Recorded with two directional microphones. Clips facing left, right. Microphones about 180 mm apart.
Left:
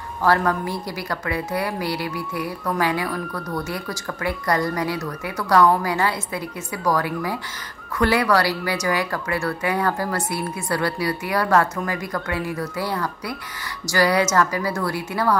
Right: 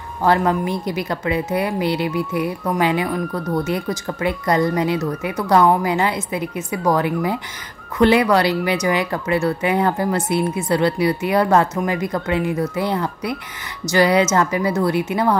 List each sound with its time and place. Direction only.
0.2 s speech: 20° right (ahead or behind)